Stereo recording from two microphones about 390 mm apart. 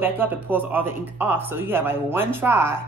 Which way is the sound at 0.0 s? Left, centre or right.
Centre.